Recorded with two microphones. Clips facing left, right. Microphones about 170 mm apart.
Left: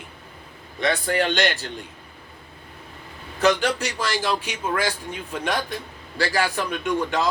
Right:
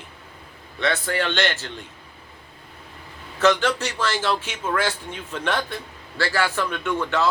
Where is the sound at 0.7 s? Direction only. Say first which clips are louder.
Left 1 dB; 35° left (ahead or behind).